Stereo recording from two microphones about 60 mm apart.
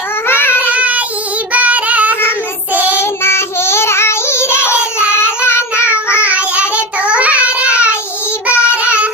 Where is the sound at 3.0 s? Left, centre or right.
Left.